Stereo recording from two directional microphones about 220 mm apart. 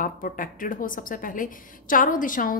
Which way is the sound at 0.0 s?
40° left (ahead or behind).